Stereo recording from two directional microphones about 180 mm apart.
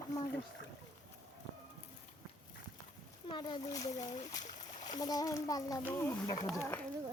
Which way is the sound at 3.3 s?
25° left (ahead or behind).